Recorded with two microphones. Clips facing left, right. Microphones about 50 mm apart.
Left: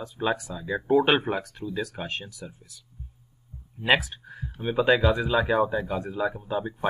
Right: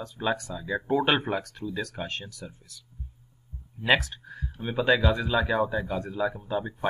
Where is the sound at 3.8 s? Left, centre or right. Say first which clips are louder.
Left 1 dB; centre.